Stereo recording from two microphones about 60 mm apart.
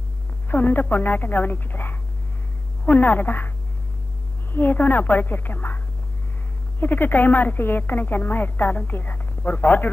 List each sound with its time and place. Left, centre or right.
0.5 s speech: left
6.8 s speech: left